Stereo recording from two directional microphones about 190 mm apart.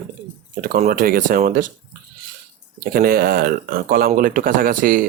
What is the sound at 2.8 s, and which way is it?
Speech, 50° right (ahead or behind).